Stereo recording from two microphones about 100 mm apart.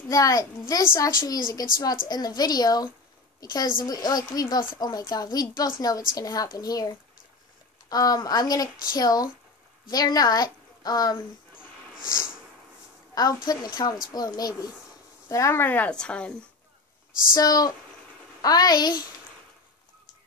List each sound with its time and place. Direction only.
0.1 s a woman's voice: 35° left (ahead or behind)
13.1 s a woman's voice: 40° left (ahead or behind); by 16.3 s 10° left (ahead or behind)
17.4 s a woman's voice: 40° left (ahead or behind)